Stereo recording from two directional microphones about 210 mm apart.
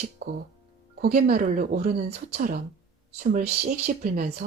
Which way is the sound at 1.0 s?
45° right (ahead or behind).